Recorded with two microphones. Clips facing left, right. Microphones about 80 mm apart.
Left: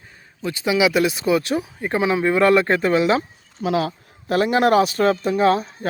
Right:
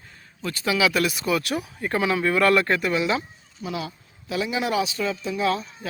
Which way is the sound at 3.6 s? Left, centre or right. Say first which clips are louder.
Left 10 dB; left.